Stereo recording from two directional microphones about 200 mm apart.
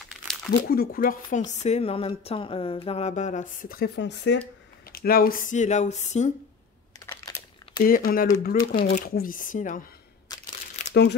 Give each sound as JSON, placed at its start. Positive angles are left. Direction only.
{"t": 0.5, "sound": "speech", "side_deg": 50}
{"t": 4.9, "sound": "speech", "side_deg": 50}
{"t": 7.1, "sound": "computer keyboard", "side_deg": 20}
{"t": 7.8, "sound": "speech", "side_deg": 45}
{"t": 8.5, "sound": "speech", "side_deg": 25}
{"t": 8.9, "sound": "speech", "side_deg": 45}
{"t": 10.3, "sound": "crumpling", "side_deg": 20}
{"t": 10.8, "sound": "crumpling", "side_deg": 35}